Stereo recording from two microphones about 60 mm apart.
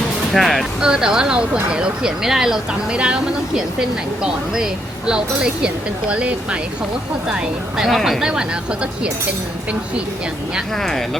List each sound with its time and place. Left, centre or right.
0.3 s speech: centre
0.8 s speech: centre
7.8 s speech: centre
8.2 s speech: centre